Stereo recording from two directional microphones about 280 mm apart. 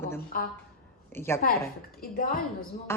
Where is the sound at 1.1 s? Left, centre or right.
Centre.